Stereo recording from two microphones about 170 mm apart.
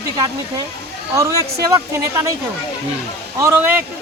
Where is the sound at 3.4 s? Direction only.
20° right (ahead or behind).